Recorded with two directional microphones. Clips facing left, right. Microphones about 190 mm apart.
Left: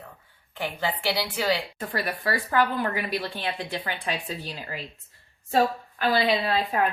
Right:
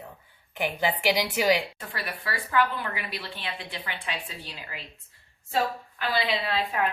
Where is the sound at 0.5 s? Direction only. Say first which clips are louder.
Right 2 dB; 15° right (ahead or behind).